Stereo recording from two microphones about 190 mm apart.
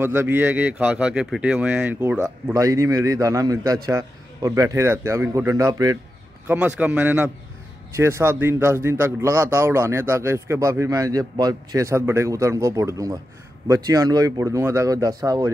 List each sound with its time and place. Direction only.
0.0 s speech: 10° right (ahead or behind)
6.4 s speech: 10° right (ahead or behind)